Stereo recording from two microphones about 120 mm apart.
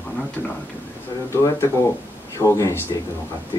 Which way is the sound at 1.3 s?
20° left (ahead or behind).